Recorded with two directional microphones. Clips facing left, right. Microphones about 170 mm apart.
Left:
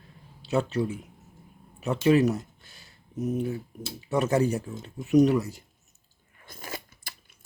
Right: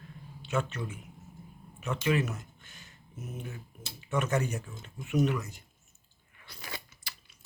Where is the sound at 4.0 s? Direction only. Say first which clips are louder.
Left 6 dB; 35° left (ahead or behind).